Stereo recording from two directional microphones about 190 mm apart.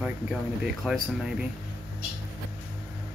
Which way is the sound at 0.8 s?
5° right (ahead or behind).